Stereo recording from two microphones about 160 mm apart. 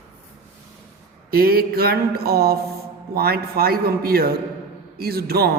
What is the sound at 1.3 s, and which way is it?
A man's voice, 70° right (ahead or behind).